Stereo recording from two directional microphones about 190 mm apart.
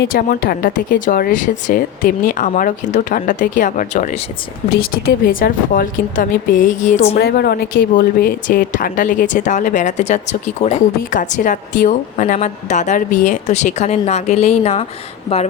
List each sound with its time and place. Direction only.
0.1 s speech: 50° left (ahead or behind)
4.7 s speech: 50° left (ahead or behind)
7.2 s a woman's voice: 55° left (ahead or behind); by 14.8 s 35° left (ahead or behind)